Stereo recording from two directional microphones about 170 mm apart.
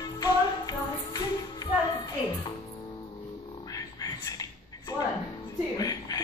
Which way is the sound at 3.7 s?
20° left (ahead or behind).